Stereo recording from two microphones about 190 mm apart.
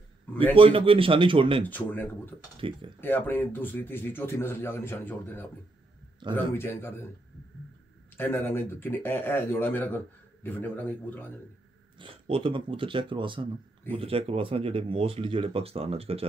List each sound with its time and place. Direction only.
0.3 s a sound: 10° left (ahead or behind)
0.6 s speech: 30° right (ahead or behind)
1.6 s speech: 10° left (ahead or behind)
8.2 s speech: 10° left (ahead or behind)
12.0 s speech: 30° right (ahead or behind)